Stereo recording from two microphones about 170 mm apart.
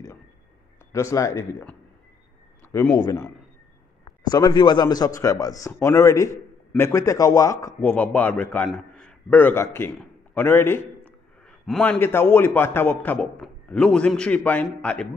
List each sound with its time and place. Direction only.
1.1 s a man's voice: 15° left (ahead or behind)